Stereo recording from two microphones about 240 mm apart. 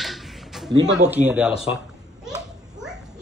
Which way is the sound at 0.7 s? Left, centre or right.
Centre.